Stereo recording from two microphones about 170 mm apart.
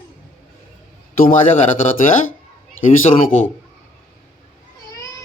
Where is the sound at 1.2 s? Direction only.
50° left (ahead or behind).